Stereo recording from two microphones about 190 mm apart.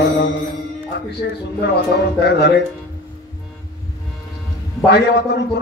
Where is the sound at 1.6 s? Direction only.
60° left (ahead or behind).